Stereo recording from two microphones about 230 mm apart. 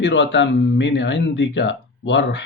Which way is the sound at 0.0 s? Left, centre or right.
Left.